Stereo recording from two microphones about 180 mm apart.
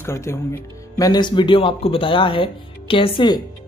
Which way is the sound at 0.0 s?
15° left (ahead or behind).